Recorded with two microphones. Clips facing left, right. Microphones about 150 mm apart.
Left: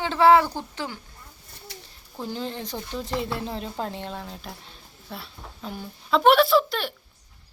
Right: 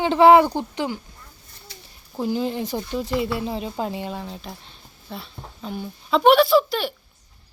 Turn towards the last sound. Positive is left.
turn(degrees=0)  # may be behind; listen again after turning